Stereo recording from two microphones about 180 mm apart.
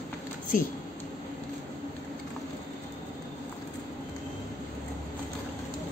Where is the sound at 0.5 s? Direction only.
50° left (ahead or behind).